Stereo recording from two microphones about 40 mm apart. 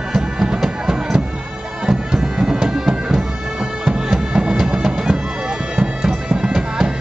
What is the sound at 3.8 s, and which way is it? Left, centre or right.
Music, centre.